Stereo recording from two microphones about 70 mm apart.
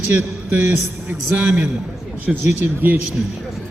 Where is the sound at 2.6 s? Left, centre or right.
Right.